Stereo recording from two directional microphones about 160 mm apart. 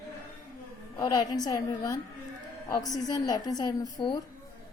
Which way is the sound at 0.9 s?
25° left (ahead or behind).